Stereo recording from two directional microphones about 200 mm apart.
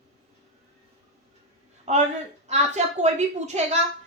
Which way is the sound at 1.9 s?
35° right (ahead or behind).